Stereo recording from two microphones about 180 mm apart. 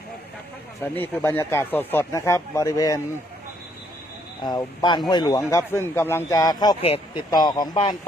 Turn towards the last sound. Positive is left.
turn(degrees=25)  # may be behind; listen again after turning